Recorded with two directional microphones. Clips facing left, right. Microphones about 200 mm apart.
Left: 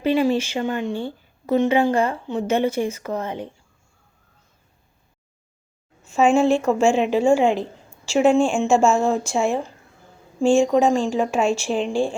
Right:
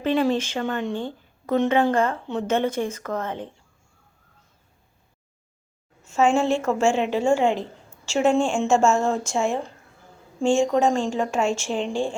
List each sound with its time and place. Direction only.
0.0 s speech: 10° left (ahead or behind)
6.1 s speech: 10° left (ahead or behind)
10.7 s speech: 10° left (ahead or behind)